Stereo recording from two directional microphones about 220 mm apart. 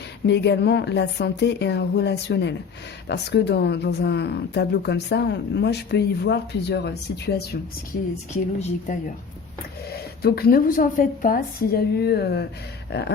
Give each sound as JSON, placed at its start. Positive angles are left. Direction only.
{"t": 0.3, "sound": "speech", "side_deg": 50}
{"t": 9.9, "sound": "speech", "side_deg": 45}